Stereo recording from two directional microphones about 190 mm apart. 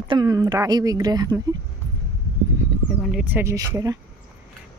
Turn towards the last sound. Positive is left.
turn(degrees=-20)  # may be behind; listen again after turning